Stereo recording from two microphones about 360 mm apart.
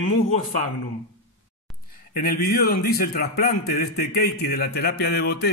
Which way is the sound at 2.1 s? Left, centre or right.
Left.